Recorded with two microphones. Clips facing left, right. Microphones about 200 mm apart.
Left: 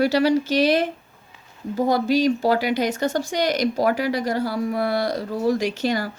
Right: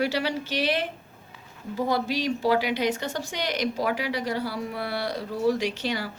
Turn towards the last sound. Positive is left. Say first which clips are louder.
# left 5 dB
turn(degrees=45)  # may be behind; listen again after turning